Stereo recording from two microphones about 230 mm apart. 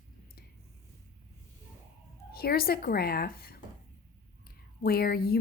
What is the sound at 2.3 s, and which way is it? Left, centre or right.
Speech, left.